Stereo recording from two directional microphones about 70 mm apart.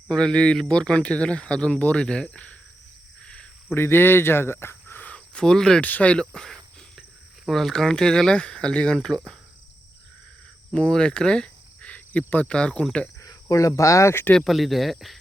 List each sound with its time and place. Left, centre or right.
0.1 s speech: centre
2.3 s cricket: centre
3.8 s speech: left; by 5.8 s centre
5.8 s speech: left
10.8 s speech: centre
13.1 s speech: left
14.3 s speech: centre